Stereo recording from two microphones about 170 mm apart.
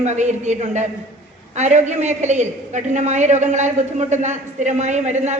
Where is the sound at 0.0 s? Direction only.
45° right (ahead or behind).